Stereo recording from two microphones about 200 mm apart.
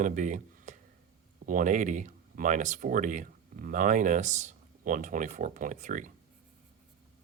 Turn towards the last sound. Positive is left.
turn(degrees=-40)  # may be behind; listen again after turning